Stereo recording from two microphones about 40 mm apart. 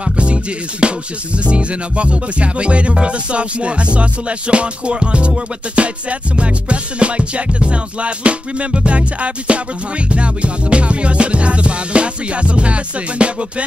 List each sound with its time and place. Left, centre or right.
0.0 s music: right